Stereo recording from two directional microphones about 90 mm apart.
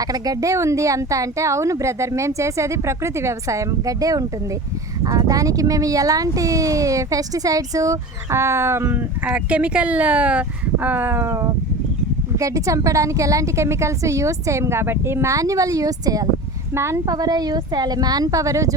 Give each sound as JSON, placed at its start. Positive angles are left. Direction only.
{"t": 0.0, "sound": "speech", "side_deg": -45}
{"t": 16.7, "sound": "speech", "side_deg": -30}
{"t": 17.1, "sound": "a woman's voice", "side_deg": -45}